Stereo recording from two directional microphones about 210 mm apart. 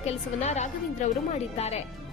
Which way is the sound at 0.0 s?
30° left (ahead or behind).